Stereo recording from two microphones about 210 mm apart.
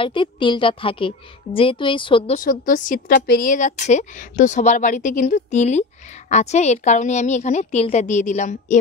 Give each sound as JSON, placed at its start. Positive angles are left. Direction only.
{"t": 0.0, "sound": "a woman's voice", "side_deg": 25}
{"t": 2.3, "sound": "a woman's voice", "side_deg": 40}